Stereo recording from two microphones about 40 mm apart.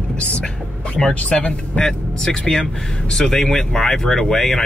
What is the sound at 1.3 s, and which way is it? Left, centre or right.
Speech, centre.